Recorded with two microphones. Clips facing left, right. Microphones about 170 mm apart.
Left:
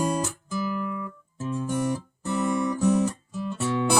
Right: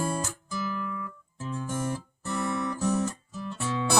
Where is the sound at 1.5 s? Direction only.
10° left (ahead or behind).